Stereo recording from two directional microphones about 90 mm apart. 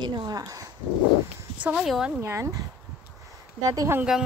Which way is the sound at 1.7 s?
5° right (ahead or behind).